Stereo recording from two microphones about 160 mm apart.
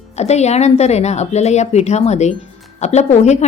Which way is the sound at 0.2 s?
45° left (ahead or behind).